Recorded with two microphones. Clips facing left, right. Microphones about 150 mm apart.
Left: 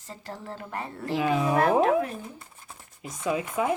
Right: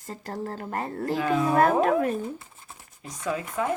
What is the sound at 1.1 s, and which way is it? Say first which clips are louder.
Speech: even; 10° left (ahead or behind).